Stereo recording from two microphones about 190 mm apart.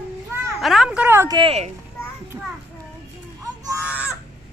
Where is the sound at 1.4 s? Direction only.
30° right (ahead or behind).